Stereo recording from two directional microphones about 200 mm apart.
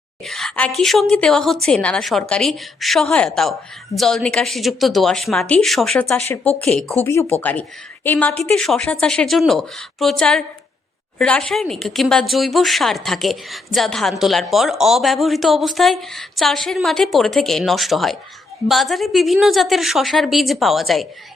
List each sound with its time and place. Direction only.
0.3 s speech: centre (ahead or behind)
6.1 s speech: 10° left (ahead or behind)
6.7 s speech: centre (ahead or behind)
7.0 s speech: 15° left (ahead or behind)